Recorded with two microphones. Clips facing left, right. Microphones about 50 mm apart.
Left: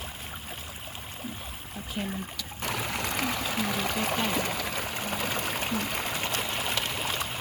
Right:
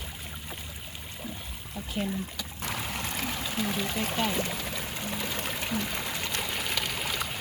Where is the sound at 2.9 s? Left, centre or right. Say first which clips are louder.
Left 3 dB; left.